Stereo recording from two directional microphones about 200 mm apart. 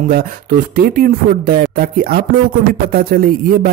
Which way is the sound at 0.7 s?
45° right (ahead or behind).